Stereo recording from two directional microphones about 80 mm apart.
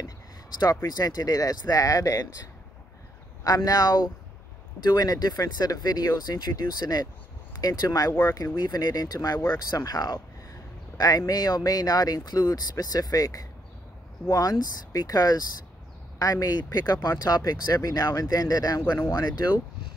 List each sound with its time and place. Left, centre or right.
0.8 s speech: left
3.4 s speech: left
8.1 s speech: left
8.5 s speech: left